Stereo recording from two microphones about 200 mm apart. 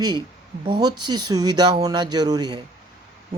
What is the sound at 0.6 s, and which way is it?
Speech, 25° right (ahead or behind).